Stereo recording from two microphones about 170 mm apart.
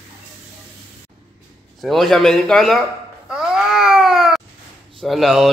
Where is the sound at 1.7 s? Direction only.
Centre (ahead or behind).